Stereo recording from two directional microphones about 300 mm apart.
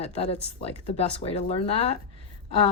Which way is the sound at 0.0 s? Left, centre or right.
Centre.